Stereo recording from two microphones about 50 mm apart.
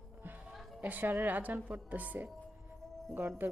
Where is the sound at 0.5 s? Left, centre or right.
Centre.